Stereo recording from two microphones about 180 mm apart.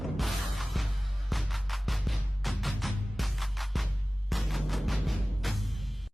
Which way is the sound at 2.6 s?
Centre (ahead or behind).